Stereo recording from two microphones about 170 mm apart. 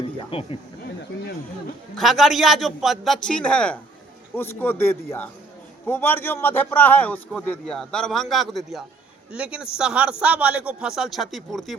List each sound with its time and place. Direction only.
0.3 s speech: 35° left (ahead or behind)
0.9 s a sound: 70° left (ahead or behind)
2.0 s a man's voice: centre (ahead or behind)